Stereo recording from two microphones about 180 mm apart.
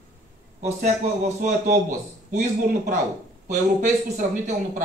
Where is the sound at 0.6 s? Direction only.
40° right (ahead or behind).